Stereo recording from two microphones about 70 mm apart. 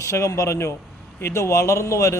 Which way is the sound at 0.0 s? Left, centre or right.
Left.